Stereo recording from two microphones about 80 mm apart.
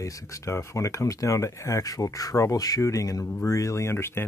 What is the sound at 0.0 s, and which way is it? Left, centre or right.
Speech, left.